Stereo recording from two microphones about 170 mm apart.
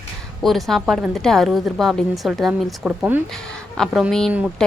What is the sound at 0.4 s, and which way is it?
A woman's voice, centre (ahead or behind).